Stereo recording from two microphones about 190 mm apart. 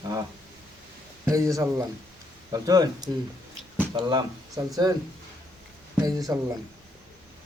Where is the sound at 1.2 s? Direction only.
15° right (ahead or behind).